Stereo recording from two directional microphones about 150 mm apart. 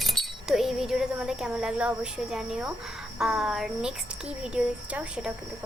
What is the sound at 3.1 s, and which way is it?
A woman's voice, 5° right (ahead or behind).